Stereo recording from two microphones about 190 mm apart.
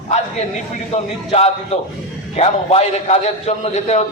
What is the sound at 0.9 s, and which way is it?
A man's voice, 35° left (ahead or behind).